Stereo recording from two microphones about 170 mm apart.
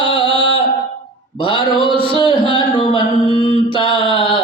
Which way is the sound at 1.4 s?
30° left (ahead or behind).